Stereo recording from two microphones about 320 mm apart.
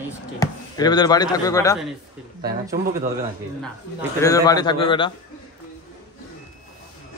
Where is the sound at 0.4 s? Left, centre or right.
Centre.